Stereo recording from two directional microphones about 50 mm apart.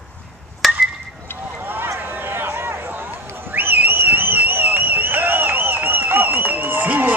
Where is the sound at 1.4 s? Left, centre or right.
Right.